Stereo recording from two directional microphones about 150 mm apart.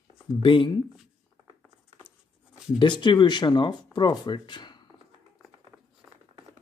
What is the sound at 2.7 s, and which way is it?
Speech, 30° left (ahead or behind).